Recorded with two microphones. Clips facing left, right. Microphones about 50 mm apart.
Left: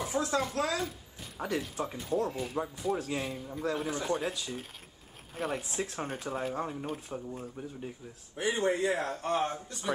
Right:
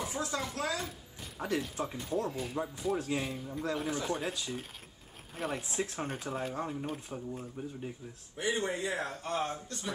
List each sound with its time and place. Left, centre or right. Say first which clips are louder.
0.3 s speech: left 4 dB; left
1.4 s speech: left 1 dB; centre
8.4 s speech: left 4 dB; left
8.8 s speech: left 5 dB; left
9.3 s speech: left 4 dB; left
9.7 s speech: left 5 dB; centre